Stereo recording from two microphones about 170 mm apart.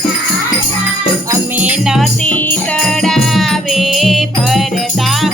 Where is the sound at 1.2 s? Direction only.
5° right (ahead or behind).